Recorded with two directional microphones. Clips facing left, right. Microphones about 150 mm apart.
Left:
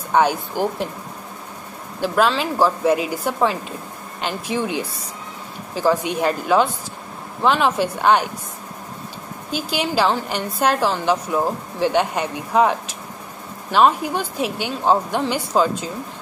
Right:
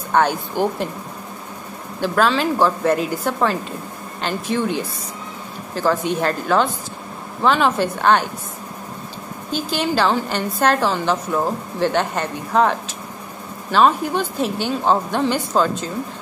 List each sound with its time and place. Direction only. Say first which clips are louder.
0.1 s a woman's voice: even; 10° left (ahead or behind)
2.0 s a woman's voice: right 1 dB; 10° left (ahead or behind)
9.5 s a woman's voice: right 2 dB; 10° left (ahead or behind)